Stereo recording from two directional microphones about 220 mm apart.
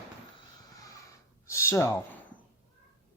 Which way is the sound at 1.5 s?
10° left (ahead or behind).